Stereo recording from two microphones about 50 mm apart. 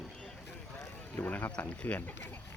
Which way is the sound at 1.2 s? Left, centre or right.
Left.